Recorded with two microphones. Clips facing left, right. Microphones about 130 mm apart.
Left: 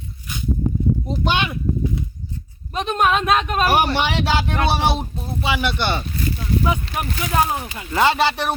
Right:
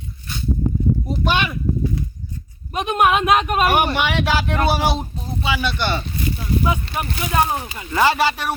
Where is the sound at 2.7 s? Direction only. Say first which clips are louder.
Right 2 dB; 10° right (ahead or behind).